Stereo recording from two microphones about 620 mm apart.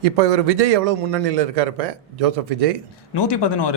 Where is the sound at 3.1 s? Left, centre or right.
Left.